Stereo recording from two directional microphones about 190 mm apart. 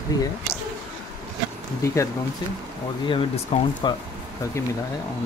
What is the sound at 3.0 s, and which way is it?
Speech, 30° left (ahead or behind).